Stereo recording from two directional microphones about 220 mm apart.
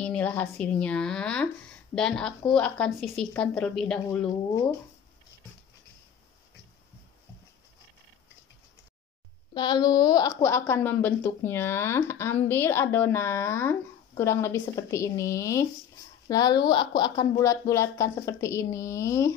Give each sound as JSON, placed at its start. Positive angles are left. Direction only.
{"t": 0.0, "sound": "a woman's voice", "side_deg": 5}
{"t": 9.5, "sound": "a woman's voice", "side_deg": 20}